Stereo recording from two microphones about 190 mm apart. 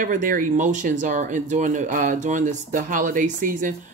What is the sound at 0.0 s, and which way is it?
Speech, 45° right (ahead or behind).